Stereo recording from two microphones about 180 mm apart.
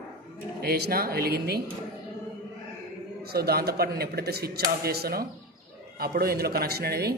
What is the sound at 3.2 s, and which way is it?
A man's voice, 60° right (ahead or behind).